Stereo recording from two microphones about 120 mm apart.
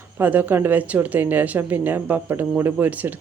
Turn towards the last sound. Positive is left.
turn(degrees=-15)  # may be behind; listen again after turning